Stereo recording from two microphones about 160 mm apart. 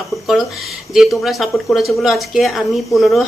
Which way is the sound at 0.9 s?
Centre (ahead or behind).